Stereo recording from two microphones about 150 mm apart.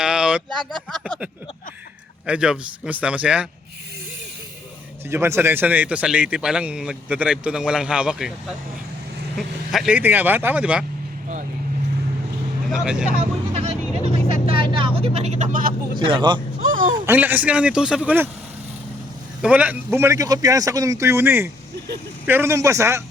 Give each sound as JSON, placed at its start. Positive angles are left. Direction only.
{"t": 0.0, "sound": "a sound", "side_deg": -5}
{"t": 0.9, "sound": "speech", "side_deg": 0}
{"t": 5.1, "sound": "speech", "side_deg": -15}
{"t": 12.7, "sound": "speech", "side_deg": -5}
{"t": 13.5, "sound": "vehicle", "side_deg": -45}
{"t": 14.4, "sound": "vehicle", "side_deg": -35}
{"t": 16.0, "sound": "speech", "side_deg": -30}
{"t": 16.6, "sound": "a sound", "side_deg": -65}
{"t": 17.1, "sound": "speech", "side_deg": -10}
{"t": 19.4, "sound": "a man's voice", "side_deg": -10}